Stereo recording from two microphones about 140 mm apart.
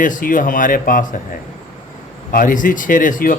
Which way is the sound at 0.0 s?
70° left (ahead or behind).